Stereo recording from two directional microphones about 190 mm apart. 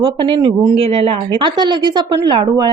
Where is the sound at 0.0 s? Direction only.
25° right (ahead or behind).